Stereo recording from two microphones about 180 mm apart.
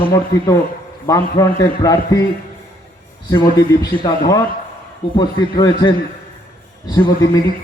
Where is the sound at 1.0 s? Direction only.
20° left (ahead or behind).